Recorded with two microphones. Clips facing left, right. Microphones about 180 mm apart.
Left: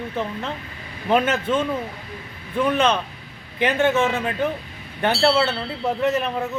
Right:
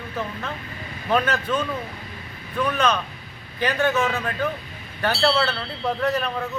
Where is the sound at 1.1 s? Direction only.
25° left (ahead or behind).